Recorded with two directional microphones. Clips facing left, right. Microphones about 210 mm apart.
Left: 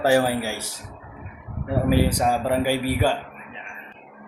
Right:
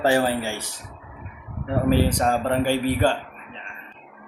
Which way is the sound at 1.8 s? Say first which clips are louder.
Even; 10° left (ahead or behind).